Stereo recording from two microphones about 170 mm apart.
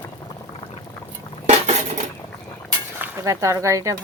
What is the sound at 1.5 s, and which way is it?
Dishes, 40° right (ahead or behind).